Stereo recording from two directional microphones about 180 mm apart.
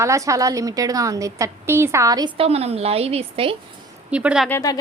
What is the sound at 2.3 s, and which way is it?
A woman's voice, 35° right (ahead or behind).